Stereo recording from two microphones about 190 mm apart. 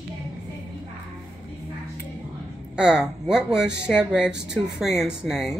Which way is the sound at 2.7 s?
5° right (ahead or behind).